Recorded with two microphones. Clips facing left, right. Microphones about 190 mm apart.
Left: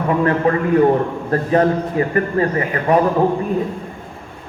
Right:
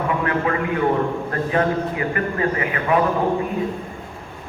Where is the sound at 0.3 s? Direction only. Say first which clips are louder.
Left 6 dB; 40° left (ahead or behind).